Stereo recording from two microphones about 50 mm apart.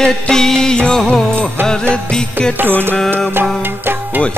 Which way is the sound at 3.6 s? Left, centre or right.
Right.